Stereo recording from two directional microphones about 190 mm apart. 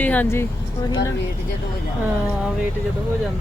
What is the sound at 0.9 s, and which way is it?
Speech, 20° left (ahead or behind).